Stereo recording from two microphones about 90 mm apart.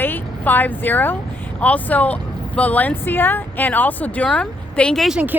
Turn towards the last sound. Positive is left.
turn(degrees=10)  # may be behind; listen again after turning